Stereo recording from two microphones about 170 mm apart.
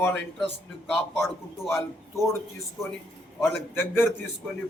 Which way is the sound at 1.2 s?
15° left (ahead or behind).